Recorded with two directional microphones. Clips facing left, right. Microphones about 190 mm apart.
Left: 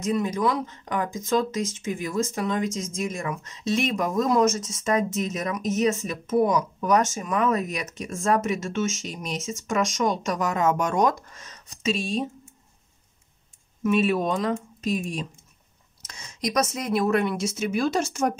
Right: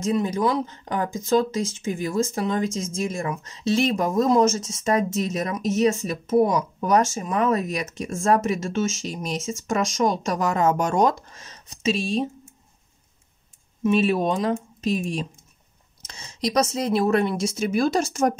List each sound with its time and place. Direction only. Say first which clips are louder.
0.0 s speech: right 2 dB; 30° right (ahead or behind)
13.8 s speech: right 2 dB; 30° right (ahead or behind)
16.0 s speech: right 3 dB; 30° right (ahead or behind)